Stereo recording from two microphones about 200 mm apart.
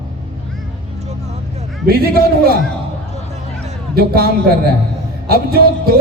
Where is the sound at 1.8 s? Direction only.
50° right (ahead or behind).